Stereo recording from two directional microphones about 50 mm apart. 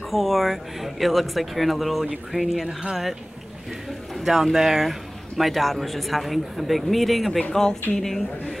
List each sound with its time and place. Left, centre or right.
0.1 s speech: centre
2.0 s speech: centre
4.2 s a woman's voice: centre